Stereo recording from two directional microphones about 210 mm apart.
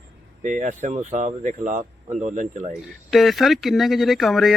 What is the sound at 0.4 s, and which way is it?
Speech, 35° right (ahead or behind).